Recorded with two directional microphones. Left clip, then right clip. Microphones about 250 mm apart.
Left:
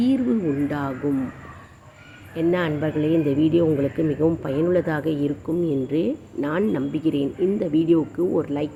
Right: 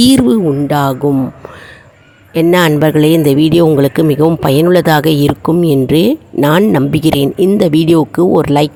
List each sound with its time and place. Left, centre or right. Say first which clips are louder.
0.0 s speech: right 13 dB; right
2.3 s speech: right 13 dB; right